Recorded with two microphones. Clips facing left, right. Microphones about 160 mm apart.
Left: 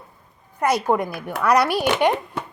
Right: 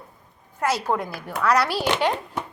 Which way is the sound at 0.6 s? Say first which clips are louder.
Left 4 dB; 15° left (ahead or behind).